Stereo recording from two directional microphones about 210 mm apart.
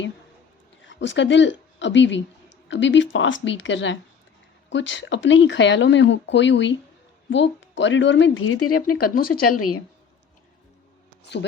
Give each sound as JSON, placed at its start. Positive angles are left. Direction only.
{"t": 0.9, "sound": "speech", "side_deg": 60}
{"t": 9.0, "sound": "speech", "side_deg": 45}
{"t": 9.5, "sound": "a woman's voice", "side_deg": 90}